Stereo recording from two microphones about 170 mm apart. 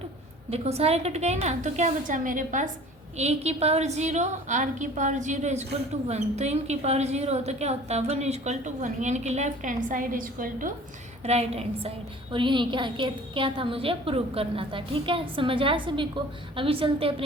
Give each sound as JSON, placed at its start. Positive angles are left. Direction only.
{"t": 0.5, "sound": "a woman's voice", "side_deg": -40}
{"t": 3.2, "sound": "a woman's voice", "side_deg": -40}
{"t": 11.2, "sound": "a woman's voice", "side_deg": -40}